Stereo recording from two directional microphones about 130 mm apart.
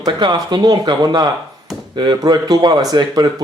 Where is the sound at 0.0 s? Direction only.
30° right (ahead or behind).